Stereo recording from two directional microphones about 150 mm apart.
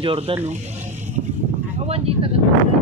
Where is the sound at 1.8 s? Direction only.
40° right (ahead or behind).